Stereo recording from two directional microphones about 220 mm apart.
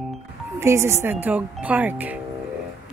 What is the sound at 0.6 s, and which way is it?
A woman's voice, 10° right (ahead or behind).